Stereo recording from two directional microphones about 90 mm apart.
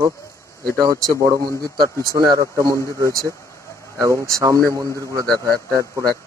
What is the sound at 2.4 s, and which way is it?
Speech, 35° right (ahead or behind).